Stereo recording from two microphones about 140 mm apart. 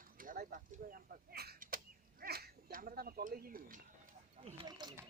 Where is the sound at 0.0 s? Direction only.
90° right.